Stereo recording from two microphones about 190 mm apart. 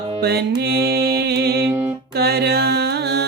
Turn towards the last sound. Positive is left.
turn(degrees=-60)  # may be behind; listen again after turning